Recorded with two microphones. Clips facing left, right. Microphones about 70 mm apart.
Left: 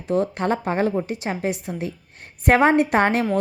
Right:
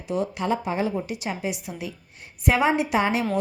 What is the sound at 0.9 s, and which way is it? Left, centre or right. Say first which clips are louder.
A woman's voice: left 4 dB; left.